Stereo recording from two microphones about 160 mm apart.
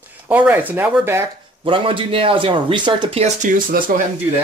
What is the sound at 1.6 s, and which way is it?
Speech, 35° right (ahead or behind).